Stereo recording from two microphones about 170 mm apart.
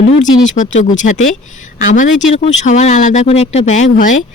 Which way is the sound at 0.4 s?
45° left (ahead or behind).